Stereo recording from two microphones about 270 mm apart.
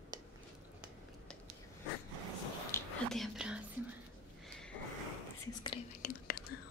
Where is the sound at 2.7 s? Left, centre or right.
Centre.